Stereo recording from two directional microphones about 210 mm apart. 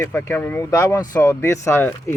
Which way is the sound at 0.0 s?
10° left (ahead or behind).